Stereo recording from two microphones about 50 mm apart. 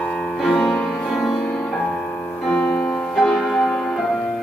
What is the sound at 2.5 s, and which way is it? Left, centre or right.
Music, centre.